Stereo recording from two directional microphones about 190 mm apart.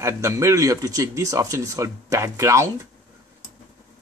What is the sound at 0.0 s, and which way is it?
Speech, 15° right (ahead or behind).